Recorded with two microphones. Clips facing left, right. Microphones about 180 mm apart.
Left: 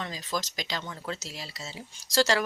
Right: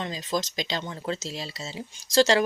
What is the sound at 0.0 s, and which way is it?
A woman's voice, 20° right (ahead or behind).